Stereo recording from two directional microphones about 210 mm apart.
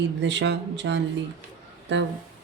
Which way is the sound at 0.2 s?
55° right (ahead or behind).